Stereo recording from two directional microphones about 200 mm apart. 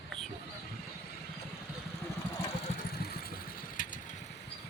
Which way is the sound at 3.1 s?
50° left (ahead or behind).